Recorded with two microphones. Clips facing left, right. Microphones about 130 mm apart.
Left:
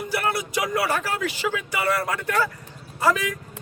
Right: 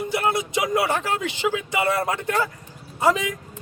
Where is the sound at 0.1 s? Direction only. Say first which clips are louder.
Right 1 dB; 20° right (ahead or behind).